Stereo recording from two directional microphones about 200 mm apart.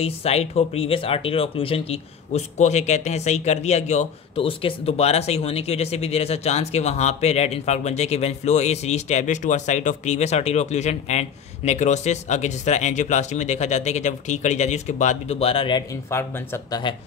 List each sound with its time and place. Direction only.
0.0 s speech: 30° left (ahead or behind)
16.1 s speech: 10° left (ahead or behind)